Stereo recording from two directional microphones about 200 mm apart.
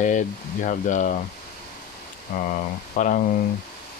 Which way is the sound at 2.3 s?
45° left (ahead or behind).